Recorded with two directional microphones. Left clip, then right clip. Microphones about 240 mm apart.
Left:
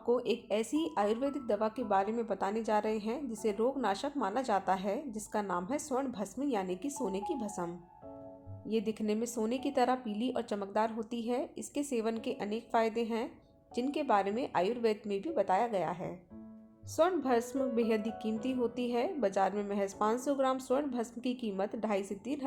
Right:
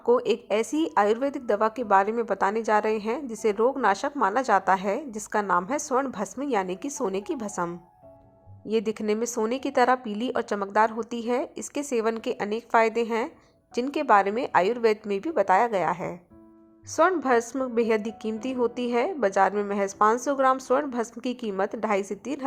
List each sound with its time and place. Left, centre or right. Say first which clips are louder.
0.1 s a woman's voice: right 9 dB; centre